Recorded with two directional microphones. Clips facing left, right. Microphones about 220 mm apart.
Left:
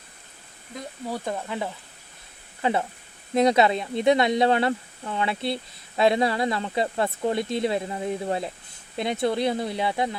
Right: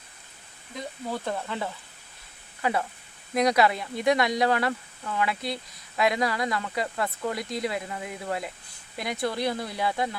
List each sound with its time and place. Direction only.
1.1 s speech: 15° left (ahead or behind)
2.6 s speech: 25° left (ahead or behind)